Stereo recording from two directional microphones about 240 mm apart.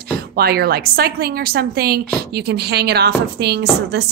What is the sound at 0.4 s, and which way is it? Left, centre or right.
A woman's voice, right.